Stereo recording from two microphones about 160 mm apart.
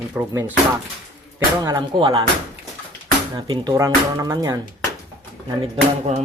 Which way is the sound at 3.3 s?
30° right (ahead or behind).